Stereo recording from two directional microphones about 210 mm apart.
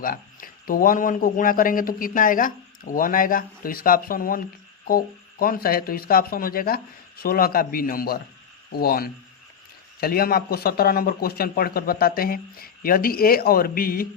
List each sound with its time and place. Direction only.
0.0 s speech: 40° left (ahead or behind)